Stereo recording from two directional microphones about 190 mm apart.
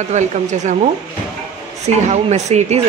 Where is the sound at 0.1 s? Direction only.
40° right (ahead or behind).